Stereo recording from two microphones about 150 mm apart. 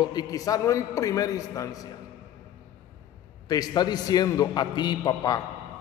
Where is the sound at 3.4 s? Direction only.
25° left (ahead or behind).